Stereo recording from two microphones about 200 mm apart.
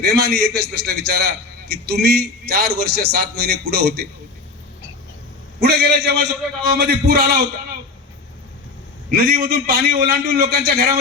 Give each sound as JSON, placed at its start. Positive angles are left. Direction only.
{"t": 0.1, "sound": "a man's voice", "side_deg": -55}
{"t": 5.5, "sound": "a man's voice", "side_deg": -50}
{"t": 9.0, "sound": "a man's voice", "side_deg": -50}